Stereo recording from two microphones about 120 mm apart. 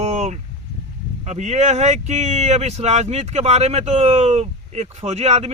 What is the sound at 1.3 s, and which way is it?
Speech, 70° right (ahead or behind).